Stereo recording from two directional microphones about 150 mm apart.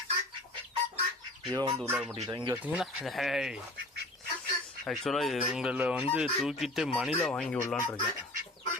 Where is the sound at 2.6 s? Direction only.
Centre (ahead or behind).